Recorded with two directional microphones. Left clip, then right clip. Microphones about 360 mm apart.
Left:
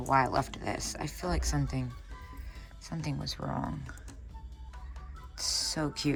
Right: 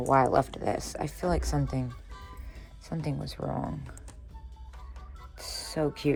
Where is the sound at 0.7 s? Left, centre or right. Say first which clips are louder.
Right 4 dB; centre.